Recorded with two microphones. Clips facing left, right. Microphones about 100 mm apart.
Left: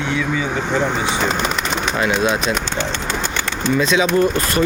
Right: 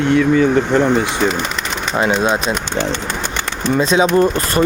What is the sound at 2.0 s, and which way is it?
Speech, 35° right (ahead or behind).